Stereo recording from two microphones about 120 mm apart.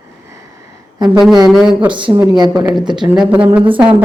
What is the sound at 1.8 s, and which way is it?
Speech, 40° right (ahead or behind).